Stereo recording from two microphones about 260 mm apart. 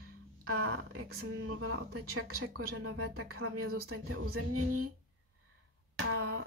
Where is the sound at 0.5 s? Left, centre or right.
Right.